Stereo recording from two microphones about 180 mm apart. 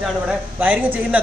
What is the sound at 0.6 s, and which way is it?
Speech, 10° right (ahead or behind).